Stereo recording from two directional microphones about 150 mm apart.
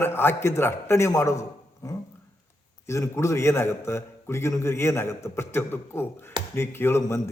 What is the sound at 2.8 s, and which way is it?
A man's voice, 20° left (ahead or behind).